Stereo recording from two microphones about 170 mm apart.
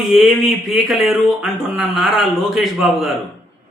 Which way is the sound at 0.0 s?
Centre (ahead or behind).